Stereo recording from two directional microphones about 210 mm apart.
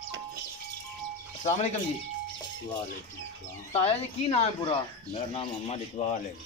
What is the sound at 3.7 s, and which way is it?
A man's voice, 30° left (ahead or behind).